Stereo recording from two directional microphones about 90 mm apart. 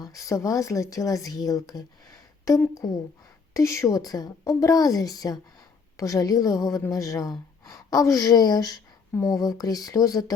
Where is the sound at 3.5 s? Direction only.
35° left (ahead or behind).